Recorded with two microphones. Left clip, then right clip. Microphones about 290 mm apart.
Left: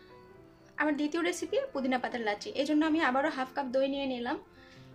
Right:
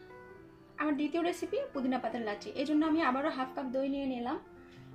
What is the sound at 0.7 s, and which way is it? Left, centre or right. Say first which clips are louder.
A woman's voice: left 2 dB; left.